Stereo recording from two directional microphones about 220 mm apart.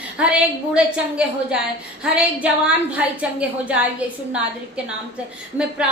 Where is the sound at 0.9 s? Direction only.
5° right (ahead or behind).